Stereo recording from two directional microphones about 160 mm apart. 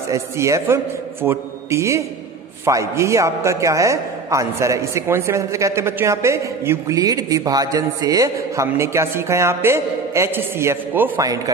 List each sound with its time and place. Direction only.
0.1 s a man's voice: 20° right (ahead or behind)